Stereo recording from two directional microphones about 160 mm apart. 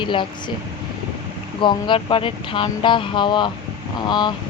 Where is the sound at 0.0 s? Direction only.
30° left (ahead or behind).